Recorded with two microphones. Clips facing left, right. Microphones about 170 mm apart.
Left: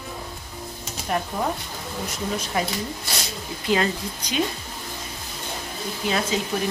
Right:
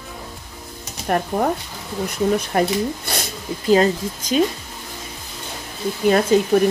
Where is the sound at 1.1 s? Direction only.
55° right (ahead or behind).